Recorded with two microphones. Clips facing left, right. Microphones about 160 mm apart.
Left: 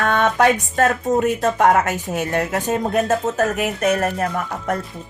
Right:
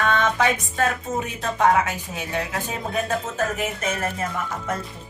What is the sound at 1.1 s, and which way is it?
Speech, 75° left (ahead or behind).